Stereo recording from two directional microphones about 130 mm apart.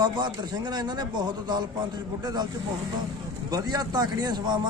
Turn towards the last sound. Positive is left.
turn(degrees=-35)  # may be behind; listen again after turning